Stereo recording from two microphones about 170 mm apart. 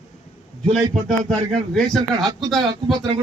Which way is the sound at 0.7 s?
5° left (ahead or behind).